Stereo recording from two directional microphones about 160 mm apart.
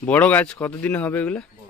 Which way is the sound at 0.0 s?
10° left (ahead or behind).